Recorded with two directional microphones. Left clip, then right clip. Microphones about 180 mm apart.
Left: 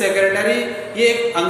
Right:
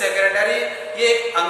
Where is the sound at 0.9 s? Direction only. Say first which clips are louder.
Left 1 dB; 20° left (ahead or behind).